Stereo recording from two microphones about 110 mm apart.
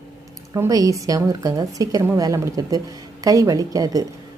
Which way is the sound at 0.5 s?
30° right (ahead or behind).